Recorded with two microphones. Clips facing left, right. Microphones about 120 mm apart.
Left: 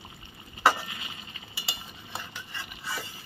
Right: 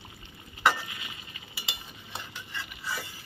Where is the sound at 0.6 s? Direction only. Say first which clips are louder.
Left 2 dB; 30° left (ahead or behind).